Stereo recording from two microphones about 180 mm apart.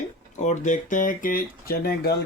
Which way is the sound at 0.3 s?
40° left (ahead or behind).